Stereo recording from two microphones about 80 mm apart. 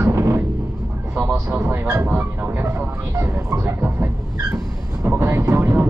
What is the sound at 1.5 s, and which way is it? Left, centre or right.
Speech, right.